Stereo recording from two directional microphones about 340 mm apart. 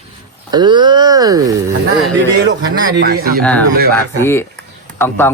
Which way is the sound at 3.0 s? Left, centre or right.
Right.